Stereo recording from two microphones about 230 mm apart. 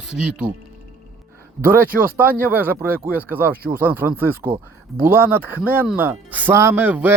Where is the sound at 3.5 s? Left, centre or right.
Right.